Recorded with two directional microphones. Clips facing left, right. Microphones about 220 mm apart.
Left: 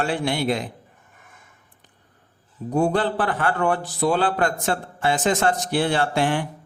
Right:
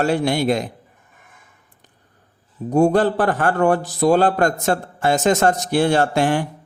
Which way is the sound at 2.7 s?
45° right (ahead or behind).